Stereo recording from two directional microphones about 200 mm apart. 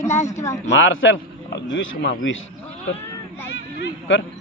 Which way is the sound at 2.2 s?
75° left (ahead or behind).